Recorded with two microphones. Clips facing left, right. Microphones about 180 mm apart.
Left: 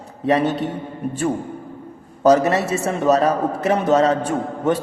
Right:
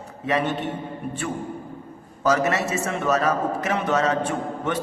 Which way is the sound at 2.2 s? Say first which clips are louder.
Left 6 dB; 35° left (ahead or behind).